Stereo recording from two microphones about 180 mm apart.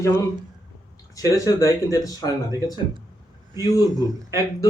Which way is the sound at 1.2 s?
20° left (ahead or behind).